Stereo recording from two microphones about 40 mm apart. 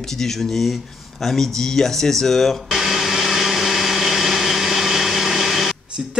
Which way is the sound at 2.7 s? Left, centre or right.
Centre.